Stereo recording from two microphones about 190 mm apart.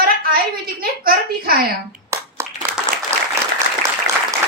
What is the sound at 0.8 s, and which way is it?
Speech, 50° right (ahead or behind).